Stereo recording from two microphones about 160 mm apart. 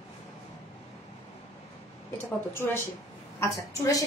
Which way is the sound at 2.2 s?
15° left (ahead or behind).